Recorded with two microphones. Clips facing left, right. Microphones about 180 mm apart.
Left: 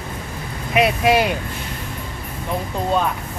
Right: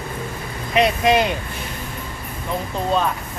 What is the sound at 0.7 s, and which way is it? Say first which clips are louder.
Speech: even; 10° left (ahead or behind).